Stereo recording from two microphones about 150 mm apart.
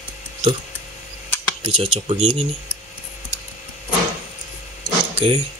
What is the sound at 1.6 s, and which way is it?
Speech, 45° right (ahead or behind).